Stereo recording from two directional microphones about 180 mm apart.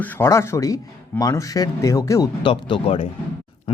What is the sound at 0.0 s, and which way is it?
Speech, 10° left (ahead or behind).